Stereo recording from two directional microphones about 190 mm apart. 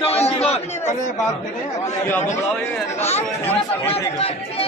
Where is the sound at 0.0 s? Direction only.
30° left (ahead or behind).